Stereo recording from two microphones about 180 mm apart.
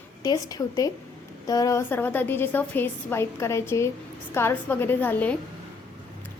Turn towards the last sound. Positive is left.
turn(degrees=10)  # may be behind; listen again after turning